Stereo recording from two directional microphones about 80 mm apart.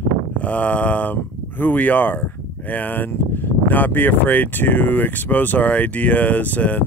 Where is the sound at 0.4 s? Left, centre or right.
Centre.